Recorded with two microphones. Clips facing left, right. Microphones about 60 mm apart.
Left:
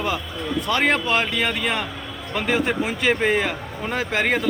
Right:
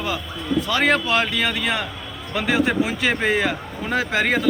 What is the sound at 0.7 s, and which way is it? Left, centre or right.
Speech, left.